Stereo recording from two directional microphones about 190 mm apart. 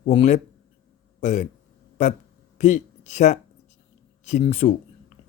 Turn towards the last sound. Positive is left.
turn(degrees=35)  # may be behind; listen again after turning